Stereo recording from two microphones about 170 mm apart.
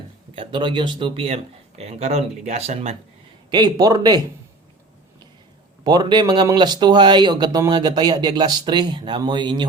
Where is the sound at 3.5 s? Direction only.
25° right (ahead or behind).